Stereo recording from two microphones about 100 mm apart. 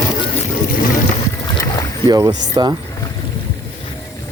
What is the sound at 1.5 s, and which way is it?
Boat, 30° left (ahead or behind).